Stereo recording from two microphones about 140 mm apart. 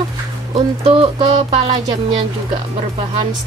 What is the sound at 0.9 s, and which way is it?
Speech, 40° right (ahead or behind).